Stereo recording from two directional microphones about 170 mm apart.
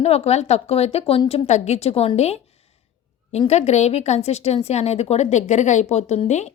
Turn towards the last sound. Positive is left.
turn(degrees=40)  # may be behind; listen again after turning